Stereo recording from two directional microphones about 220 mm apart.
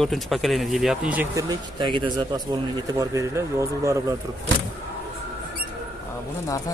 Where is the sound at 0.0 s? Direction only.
Centre (ahead or behind).